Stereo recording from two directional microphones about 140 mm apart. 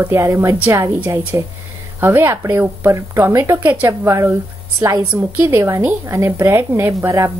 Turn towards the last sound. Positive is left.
turn(degrees=-20)  # may be behind; listen again after turning